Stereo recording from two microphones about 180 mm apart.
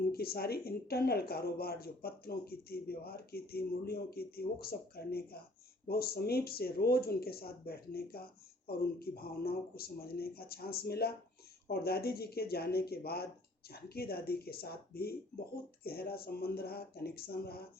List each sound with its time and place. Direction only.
0.1 s speech: 60° left (ahead or behind)